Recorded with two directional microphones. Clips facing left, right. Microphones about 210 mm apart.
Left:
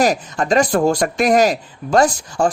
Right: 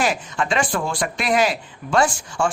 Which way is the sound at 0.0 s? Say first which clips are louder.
Left 5 dB; 40° left (ahead or behind).